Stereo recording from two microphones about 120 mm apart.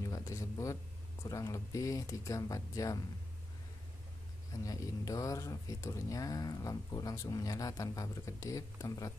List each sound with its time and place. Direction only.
0.0 s a sound: 25° left (ahead or behind)
1.2 s speech: 25° left (ahead or behind)
4.6 s speech: 30° left (ahead or behind)